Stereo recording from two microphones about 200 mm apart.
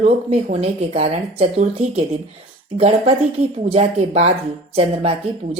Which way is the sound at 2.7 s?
30° right (ahead or behind).